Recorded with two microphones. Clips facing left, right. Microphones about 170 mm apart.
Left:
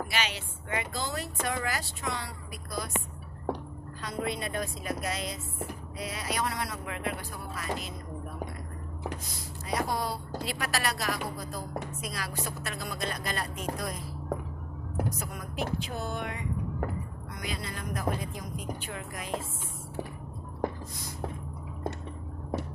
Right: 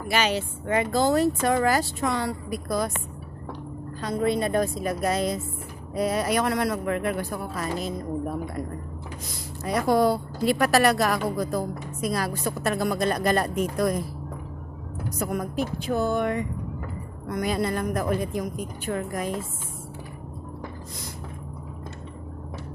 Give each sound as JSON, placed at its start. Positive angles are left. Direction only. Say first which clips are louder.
{"t": 0.1, "sound": "speech", "louder": "right 9 dB", "side_deg": -45}
{"t": 4.0, "sound": "speech", "louder": "right 9 dB", "side_deg": -40}
{"t": 7.5, "sound": "a woman's voice", "louder": "right 5 dB", "side_deg": -40}
{"t": 9.6, "sound": "speech", "louder": "right 10 dB", "side_deg": -60}
{"t": 15.2, "sound": "speech", "louder": "right 8 dB", "side_deg": -55}